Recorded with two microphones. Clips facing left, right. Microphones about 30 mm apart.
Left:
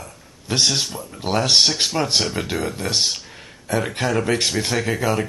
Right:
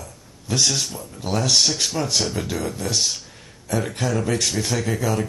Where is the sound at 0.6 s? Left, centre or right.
Left.